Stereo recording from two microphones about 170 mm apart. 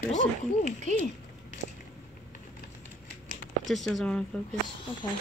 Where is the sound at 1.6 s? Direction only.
65° right (ahead or behind).